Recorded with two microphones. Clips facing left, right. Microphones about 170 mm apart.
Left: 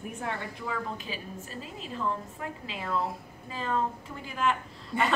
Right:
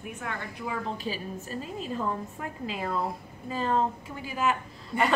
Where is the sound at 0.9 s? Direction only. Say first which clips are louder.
Right 5 dB; 40° right (ahead or behind).